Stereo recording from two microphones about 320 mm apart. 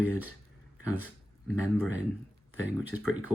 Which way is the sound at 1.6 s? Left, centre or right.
Centre.